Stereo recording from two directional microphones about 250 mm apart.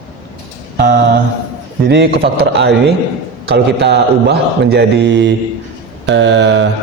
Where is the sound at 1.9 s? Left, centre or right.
Right.